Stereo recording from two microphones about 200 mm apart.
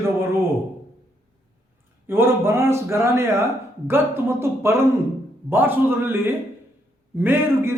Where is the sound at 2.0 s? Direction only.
10° right (ahead or behind).